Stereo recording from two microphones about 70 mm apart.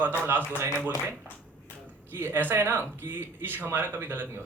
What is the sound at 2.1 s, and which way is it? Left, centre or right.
A man's voice, right.